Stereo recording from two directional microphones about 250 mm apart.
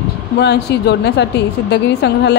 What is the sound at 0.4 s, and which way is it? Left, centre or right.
A woman's voice, left.